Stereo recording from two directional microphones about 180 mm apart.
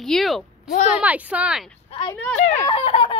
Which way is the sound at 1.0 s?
10° right (ahead or behind).